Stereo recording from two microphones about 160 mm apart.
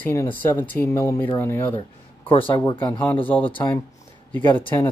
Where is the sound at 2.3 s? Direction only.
35° left (ahead or behind).